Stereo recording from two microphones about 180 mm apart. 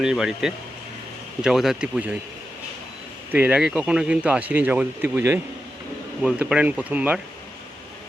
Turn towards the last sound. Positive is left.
turn(degrees=-5)  # may be behind; listen again after turning